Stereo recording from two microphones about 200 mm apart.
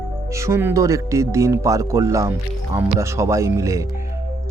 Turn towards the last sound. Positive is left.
turn(degrees=-15)  # may be behind; listen again after turning